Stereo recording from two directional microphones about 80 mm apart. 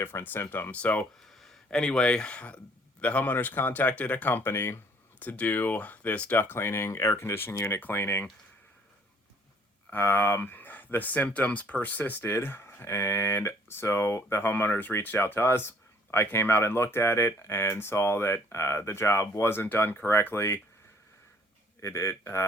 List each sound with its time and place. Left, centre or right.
0.0 s speech: left
1.4 s speech: centre; by 8.3 s left
9.9 s speech: left
21.8 s speech: left